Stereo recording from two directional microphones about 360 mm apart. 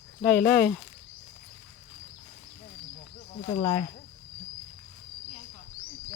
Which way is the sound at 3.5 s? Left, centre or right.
Centre.